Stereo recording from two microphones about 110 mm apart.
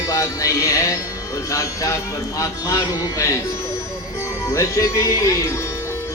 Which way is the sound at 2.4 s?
30° left (ahead or behind).